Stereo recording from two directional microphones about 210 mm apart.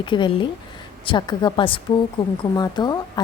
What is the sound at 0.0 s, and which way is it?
A woman's voice, 20° left (ahead or behind).